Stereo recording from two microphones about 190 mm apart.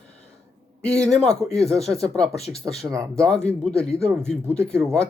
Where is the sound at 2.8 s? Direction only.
15° right (ahead or behind).